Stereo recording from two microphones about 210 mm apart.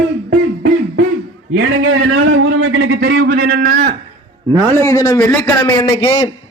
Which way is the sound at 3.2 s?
45° right (ahead or behind).